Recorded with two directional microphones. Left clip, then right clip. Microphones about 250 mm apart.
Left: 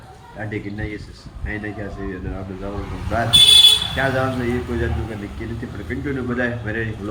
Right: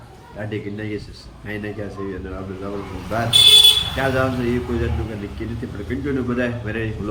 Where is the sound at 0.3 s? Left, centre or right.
Centre.